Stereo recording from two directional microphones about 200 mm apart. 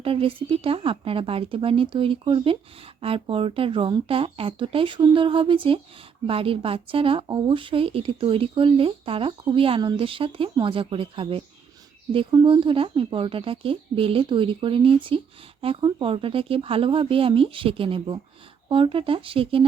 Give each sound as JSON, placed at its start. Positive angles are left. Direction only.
{"t": 0.0, "sound": "speech", "side_deg": -25}